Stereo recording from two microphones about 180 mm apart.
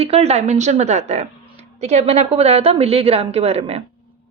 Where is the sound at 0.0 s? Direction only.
35° right (ahead or behind).